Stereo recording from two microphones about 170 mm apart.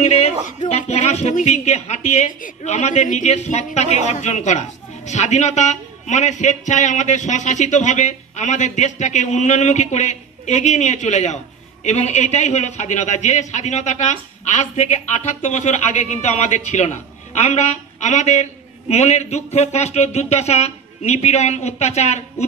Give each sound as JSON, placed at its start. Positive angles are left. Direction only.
{"t": 0.0, "sound": "speech", "side_deg": 40}